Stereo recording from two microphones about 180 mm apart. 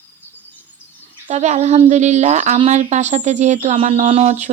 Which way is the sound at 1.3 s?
40° right (ahead or behind).